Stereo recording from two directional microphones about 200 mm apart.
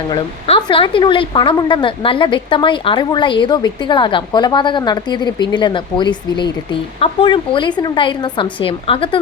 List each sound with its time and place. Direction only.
0.1 s a woman's voice: 25° left (ahead or behind)